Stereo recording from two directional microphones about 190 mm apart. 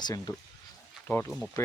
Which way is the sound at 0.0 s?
20° left (ahead or behind).